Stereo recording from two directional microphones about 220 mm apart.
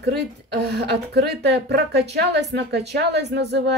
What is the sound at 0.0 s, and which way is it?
Speech, 50° right (ahead or behind).